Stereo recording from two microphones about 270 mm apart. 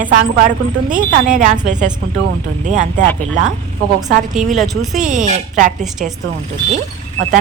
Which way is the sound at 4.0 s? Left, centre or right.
Centre.